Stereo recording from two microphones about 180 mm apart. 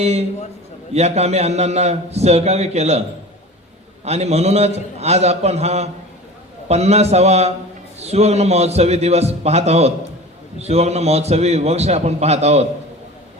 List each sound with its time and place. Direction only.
0.0 s a man's voice: 35° right (ahead or behind)
4.0 s a man's voice: 35° right (ahead or behind)